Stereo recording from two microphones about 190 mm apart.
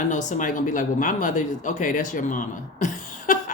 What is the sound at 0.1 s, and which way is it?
A woman's voice, 40° left (ahead or behind).